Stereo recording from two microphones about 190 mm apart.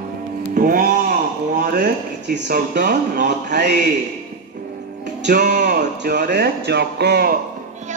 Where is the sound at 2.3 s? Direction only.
65° right (ahead or behind).